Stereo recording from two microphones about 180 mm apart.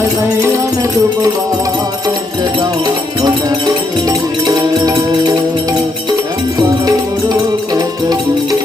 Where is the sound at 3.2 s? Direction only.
20° right (ahead or behind).